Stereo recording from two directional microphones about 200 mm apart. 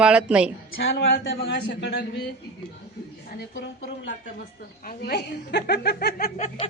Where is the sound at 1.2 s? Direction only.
60° left (ahead or behind).